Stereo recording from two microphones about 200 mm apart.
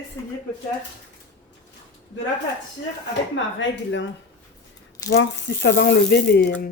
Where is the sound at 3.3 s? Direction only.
65° left (ahead or behind).